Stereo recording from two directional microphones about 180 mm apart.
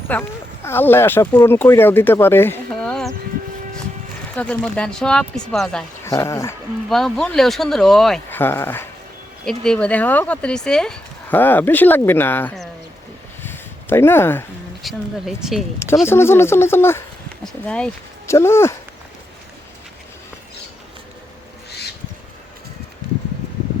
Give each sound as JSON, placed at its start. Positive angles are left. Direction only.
{"t": 0.1, "sound": "speech", "side_deg": 10}
{"t": 4.4, "sound": "speech", "side_deg": 5}
{"t": 6.1, "sound": "speech", "side_deg": 20}
{"t": 6.8, "sound": "speech", "side_deg": 0}
{"t": 13.4, "sound": "a sound", "side_deg": 10}
{"t": 14.8, "sound": "speech", "side_deg": 0}
{"t": 16.0, "sound": "speech", "side_deg": 15}